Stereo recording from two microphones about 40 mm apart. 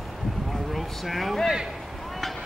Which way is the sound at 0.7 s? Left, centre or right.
Centre.